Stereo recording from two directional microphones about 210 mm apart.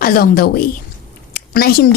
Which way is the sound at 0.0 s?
45° left (ahead or behind).